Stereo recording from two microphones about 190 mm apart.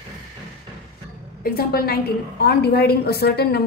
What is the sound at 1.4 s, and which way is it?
A woman's voice, 55° left (ahead or behind).